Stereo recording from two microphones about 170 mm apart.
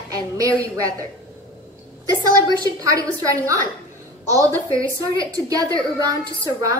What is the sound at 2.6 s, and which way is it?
A woman's voice, 20° right (ahead or behind).